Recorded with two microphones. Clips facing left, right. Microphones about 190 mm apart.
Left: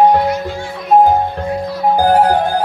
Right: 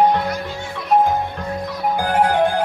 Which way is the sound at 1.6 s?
35° left (ahead or behind).